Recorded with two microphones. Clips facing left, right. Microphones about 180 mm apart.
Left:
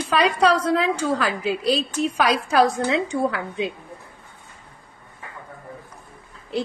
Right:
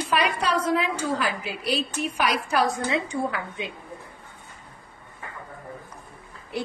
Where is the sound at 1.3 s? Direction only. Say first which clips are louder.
Left 6 dB; 30° left (ahead or behind).